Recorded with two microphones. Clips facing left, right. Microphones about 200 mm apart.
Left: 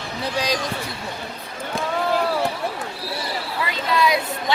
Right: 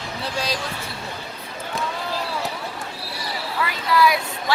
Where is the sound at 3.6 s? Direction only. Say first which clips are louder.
Right 1 dB; 20° left (ahead or behind).